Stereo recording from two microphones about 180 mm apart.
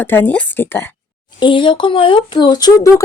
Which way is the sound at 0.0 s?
10° left (ahead or behind).